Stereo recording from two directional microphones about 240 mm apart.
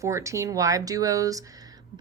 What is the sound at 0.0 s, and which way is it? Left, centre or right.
Speech, centre.